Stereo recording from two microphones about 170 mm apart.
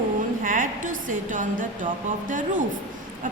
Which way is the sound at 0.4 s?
50° right (ahead or behind).